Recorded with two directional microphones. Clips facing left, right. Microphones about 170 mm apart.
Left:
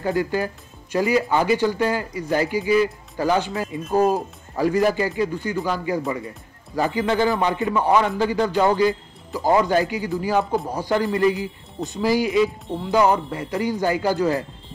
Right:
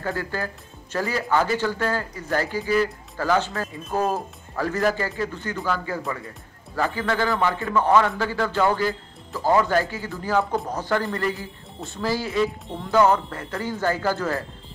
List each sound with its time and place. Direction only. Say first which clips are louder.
0.0 s speech: left 6 dB; 15° left (ahead or behind)